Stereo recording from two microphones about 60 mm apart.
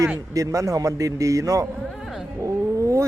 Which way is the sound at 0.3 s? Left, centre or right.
Right.